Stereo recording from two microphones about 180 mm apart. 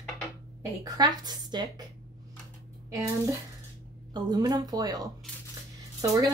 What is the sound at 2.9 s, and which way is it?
Speech, 15° right (ahead or behind).